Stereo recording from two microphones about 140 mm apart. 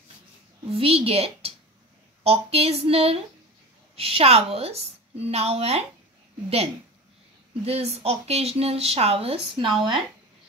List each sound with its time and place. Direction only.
0.7 s speech: 45° right (ahead or behind)
7.6 s speech: 45° right (ahead or behind)